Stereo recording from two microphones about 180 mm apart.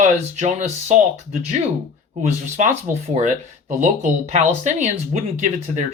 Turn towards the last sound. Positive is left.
turn(degrees=-40)  # may be behind; listen again after turning